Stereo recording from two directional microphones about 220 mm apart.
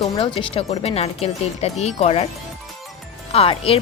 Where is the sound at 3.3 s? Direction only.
25° left (ahead or behind).